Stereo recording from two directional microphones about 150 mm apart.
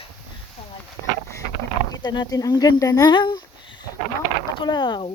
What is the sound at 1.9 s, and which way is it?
Speech, 25° left (ahead or behind).